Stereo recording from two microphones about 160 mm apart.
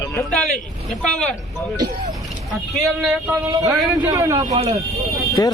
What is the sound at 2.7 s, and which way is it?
Speech, centre (ahead or behind).